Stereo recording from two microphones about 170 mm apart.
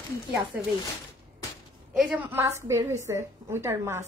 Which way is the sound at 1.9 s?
5° right (ahead or behind).